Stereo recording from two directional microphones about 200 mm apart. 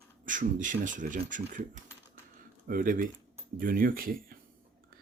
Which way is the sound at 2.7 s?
45° right (ahead or behind).